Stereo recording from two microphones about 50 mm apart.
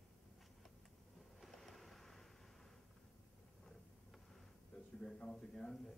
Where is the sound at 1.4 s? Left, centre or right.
Centre.